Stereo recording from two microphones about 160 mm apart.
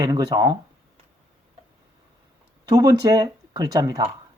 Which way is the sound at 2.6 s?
20° right (ahead or behind).